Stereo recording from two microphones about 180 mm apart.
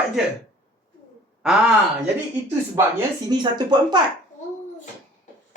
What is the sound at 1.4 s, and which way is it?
Speech, 5° right (ahead or behind).